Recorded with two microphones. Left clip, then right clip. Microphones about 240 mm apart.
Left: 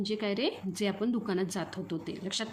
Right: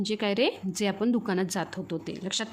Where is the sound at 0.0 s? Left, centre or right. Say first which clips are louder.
Right 5 dB; right.